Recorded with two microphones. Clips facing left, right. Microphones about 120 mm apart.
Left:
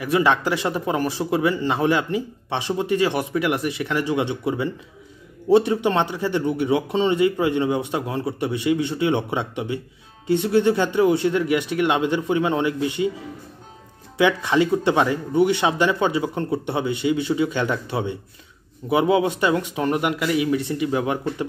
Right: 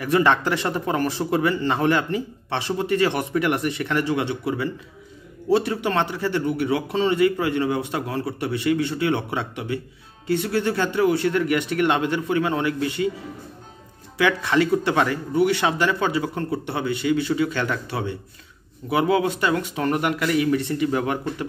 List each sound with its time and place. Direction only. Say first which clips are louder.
0.0 s speech: even; 10° left (ahead or behind)
14.1 s speech: left 1 dB; 20° left (ahead or behind)